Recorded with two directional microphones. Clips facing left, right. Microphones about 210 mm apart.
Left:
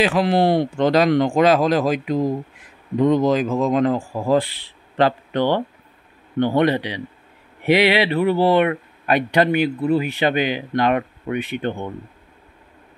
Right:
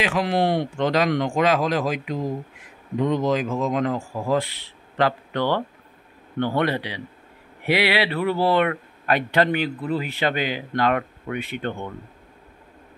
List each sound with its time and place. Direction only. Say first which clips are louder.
0.0 s a man's voice: left 5 dB; 35° left (ahead or behind); by 11.9 s 20° left (ahead or behind)